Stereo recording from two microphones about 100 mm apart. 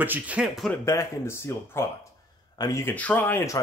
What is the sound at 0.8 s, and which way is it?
Speech, 30° left (ahead or behind).